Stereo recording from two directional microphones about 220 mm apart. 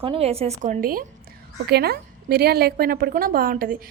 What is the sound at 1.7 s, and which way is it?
A woman's voice, 45° right (ahead or behind).